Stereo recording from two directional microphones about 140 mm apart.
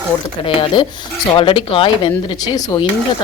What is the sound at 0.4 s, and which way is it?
A woman's voice, 35° left (ahead or behind).